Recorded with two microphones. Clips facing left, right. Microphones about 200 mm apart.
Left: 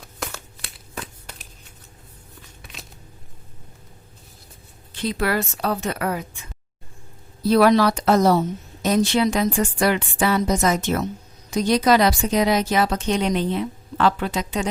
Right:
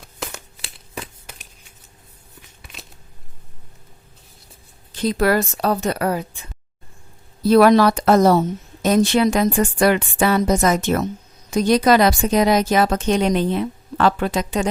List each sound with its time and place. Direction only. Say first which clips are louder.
0.9 s shuffling cards: right 2 dB; 5° right (ahead or behind)
4.9 s a woman's voice: right 5 dB; 40° right (ahead or behind)
7.5 s speech: right 3 dB; 50° right (ahead or behind)